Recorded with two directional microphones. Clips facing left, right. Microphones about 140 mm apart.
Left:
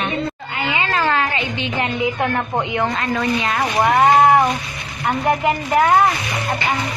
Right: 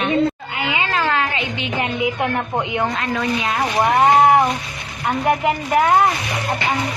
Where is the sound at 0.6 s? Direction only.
15° right (ahead or behind).